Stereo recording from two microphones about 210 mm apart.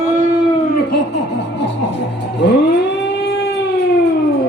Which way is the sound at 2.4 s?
55° left (ahead or behind).